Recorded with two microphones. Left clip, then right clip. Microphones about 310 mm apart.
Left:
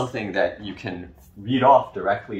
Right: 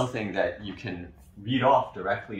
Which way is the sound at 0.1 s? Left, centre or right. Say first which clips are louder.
Left 5 dB; centre.